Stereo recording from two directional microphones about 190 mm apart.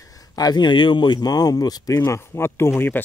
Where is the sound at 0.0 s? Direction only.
20° left (ahead or behind).